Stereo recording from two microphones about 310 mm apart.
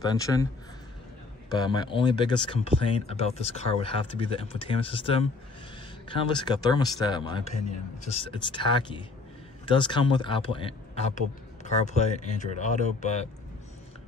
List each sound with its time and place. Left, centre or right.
0.0 s speech: centre
1.5 s speech: centre